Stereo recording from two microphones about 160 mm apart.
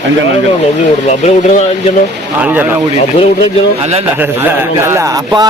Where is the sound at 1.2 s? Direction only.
45° left (ahead or behind).